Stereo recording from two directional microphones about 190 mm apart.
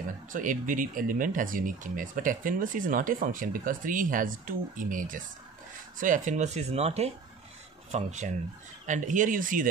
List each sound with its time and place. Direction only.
0.3 s speech: 45° right (ahead or behind)